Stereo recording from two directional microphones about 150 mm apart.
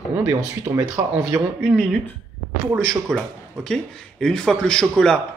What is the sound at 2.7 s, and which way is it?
Speech, 5° left (ahead or behind).